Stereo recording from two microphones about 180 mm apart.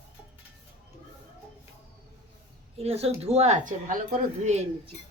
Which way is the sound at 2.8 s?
35° right (ahead or behind).